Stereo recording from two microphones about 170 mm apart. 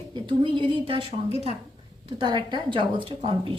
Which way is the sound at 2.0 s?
30° right (ahead or behind).